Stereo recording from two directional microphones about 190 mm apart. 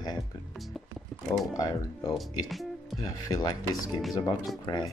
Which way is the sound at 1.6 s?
20° left (ahead or behind).